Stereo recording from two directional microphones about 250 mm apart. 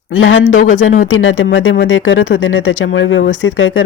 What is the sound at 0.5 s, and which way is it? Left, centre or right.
Speech, left.